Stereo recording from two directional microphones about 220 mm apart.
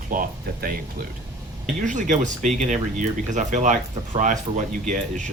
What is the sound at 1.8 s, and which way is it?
Speech, 35° right (ahead or behind).